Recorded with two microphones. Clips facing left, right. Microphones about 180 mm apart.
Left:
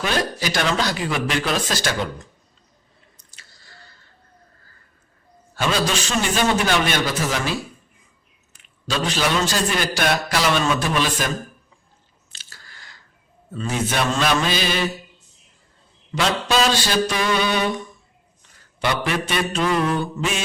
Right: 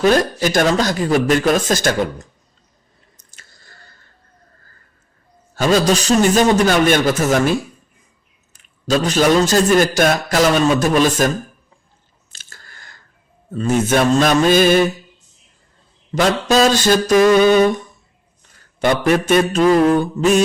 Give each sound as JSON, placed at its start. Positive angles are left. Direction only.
{"t": 0.0, "sound": "a man's voice", "side_deg": -45}
{"t": 3.3, "sound": "squish", "side_deg": -50}
{"t": 5.5, "sound": "a man's voice", "side_deg": -40}
{"t": 8.5, "sound": "a man's voice", "side_deg": -40}
{"t": 12.3, "sound": "a sound", "side_deg": -50}
{"t": 13.5, "sound": "a man's voice", "side_deg": -45}
{"t": 16.1, "sound": "a man's voice", "side_deg": -45}
{"t": 18.8, "sound": "a man's voice", "side_deg": -45}